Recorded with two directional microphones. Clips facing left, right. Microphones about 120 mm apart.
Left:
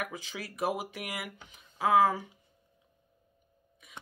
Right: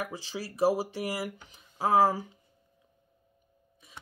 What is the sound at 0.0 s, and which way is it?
Speech, 30° right (ahead or behind).